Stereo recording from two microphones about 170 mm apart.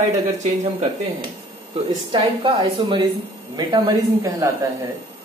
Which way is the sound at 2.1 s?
30° right (ahead or behind).